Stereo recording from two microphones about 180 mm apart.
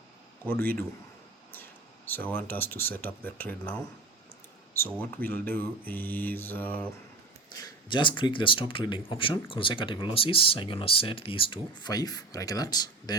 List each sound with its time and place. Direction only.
0.4 s speech: 10° left (ahead or behind)
7.6 s speech: 25° left (ahead or behind)